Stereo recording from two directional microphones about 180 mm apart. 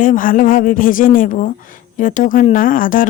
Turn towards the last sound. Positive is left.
turn(degrees=50)  # may be behind; listen again after turning